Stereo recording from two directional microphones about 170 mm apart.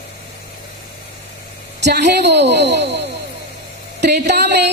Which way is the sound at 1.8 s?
80° right.